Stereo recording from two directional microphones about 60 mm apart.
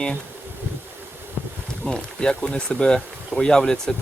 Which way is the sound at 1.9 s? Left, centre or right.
Centre.